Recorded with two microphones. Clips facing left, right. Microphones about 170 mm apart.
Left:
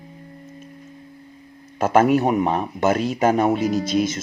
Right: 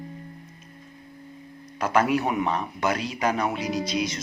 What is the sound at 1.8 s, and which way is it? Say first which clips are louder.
Speech: left 6 dB; 45° left (ahead or behind).